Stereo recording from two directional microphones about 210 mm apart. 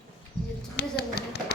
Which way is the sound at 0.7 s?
50° left (ahead or behind).